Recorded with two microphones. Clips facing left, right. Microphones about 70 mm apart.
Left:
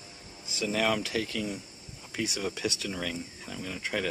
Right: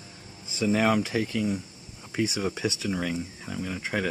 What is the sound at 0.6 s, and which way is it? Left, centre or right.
Speech, centre.